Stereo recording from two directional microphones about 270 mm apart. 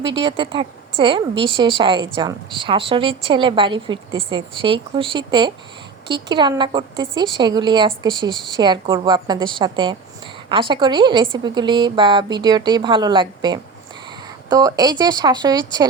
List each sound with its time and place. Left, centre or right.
0.0 s a woman's voice: centre